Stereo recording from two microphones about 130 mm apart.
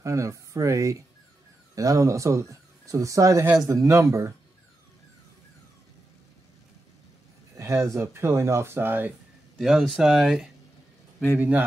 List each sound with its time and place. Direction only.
0.0 s speech: 25° right (ahead or behind)
7.5 s speech: 25° right (ahead or behind)
9.6 s a man's voice: centre (ahead or behind)